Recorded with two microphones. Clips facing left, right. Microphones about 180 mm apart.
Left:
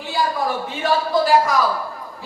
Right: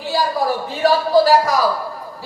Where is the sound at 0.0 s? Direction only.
40° right (ahead or behind).